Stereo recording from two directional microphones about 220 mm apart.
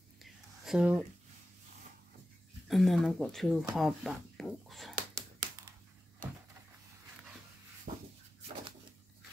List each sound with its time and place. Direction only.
0.2 s whispering: centre (ahead or behind)
2.7 s speech: centre (ahead or behind)
7.9 s a sound: 35° right (ahead or behind)